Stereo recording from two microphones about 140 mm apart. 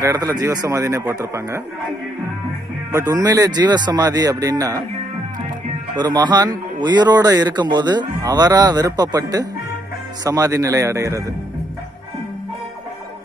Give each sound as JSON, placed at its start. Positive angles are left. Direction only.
{"t": 0.0, "sound": "a man's voice", "side_deg": -25}
{"t": 2.9, "sound": "a man's voice", "side_deg": -25}
{"t": 5.9, "sound": "a man's voice", "side_deg": -30}